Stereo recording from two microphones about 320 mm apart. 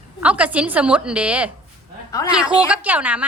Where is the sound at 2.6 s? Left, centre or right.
Centre.